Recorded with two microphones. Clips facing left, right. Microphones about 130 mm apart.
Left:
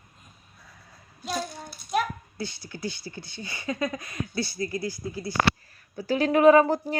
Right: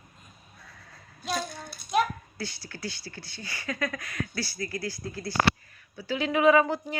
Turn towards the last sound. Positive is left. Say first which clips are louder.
# left 4 dB
turn(degrees=40)  # may be behind; listen again after turning